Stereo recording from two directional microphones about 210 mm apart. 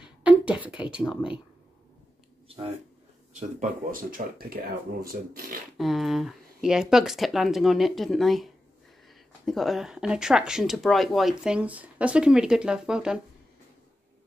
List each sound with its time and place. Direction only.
0.2 s a sound: 5° right (ahead or behind)
0.9 s speech: 5° right (ahead or behind)
2.4 s a sound: 25° right (ahead or behind)
3.3 s speech: 40° right (ahead or behind)
5.8 s speech: centre (ahead or behind)
9.5 s speech: centre (ahead or behind)